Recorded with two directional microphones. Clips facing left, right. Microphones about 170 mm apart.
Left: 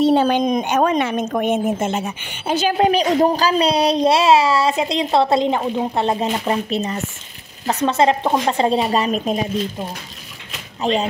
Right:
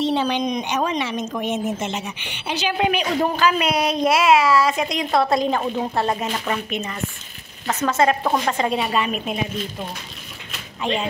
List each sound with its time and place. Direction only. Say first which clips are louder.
0.0 s a woman's voice: left 6 dB; 50° left (ahead or behind)
10.8 s speech: left 5 dB; 35° left (ahead or behind)